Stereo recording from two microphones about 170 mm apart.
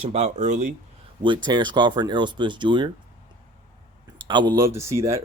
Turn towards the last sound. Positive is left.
turn(degrees=-15)  # may be behind; listen again after turning